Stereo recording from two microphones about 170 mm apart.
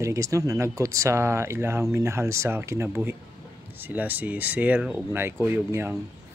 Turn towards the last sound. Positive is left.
turn(degrees=-10)  # may be behind; listen again after turning